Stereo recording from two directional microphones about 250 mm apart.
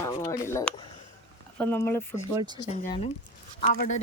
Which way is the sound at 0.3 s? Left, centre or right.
Centre.